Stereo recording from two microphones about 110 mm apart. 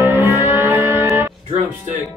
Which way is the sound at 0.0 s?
20° right (ahead or behind).